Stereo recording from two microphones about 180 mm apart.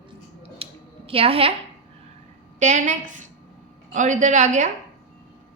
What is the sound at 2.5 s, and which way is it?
A woman's voice, 40° right (ahead or behind).